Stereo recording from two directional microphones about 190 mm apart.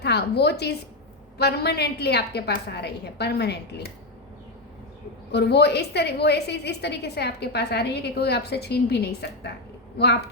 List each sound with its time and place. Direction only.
0.0 s a woman's voice: 60° left (ahead or behind)
5.3 s a woman's voice: 60° left (ahead or behind)